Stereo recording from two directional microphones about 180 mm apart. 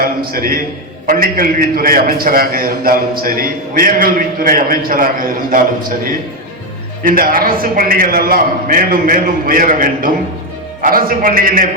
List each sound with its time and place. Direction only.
0.0 s a man's voice: 55° right (ahead or behind)
7.0 s a man's voice: 50° right (ahead or behind)